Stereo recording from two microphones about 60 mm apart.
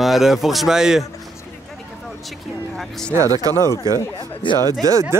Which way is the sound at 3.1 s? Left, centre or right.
Right.